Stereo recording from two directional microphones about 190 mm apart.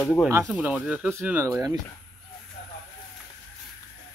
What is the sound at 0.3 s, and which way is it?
Speech, 10° right (ahead or behind).